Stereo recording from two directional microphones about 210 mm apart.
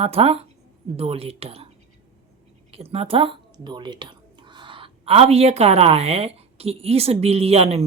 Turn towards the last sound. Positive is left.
turn(degrees=-30)  # may be behind; listen again after turning